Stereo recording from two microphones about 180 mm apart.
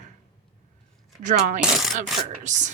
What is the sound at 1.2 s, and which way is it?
Speech, 45° right (ahead or behind).